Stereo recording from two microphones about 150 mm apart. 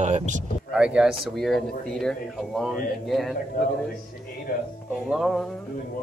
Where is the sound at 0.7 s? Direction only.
5° right (ahead or behind).